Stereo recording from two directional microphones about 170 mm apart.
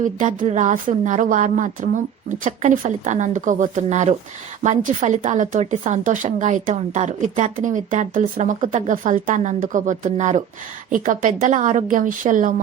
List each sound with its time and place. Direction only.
0.0 s a woman's voice: 50° right (ahead or behind)